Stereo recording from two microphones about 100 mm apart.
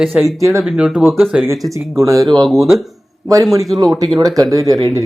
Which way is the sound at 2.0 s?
30° right (ahead or behind).